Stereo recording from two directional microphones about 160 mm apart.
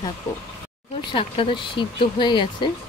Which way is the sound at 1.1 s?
30° left (ahead or behind).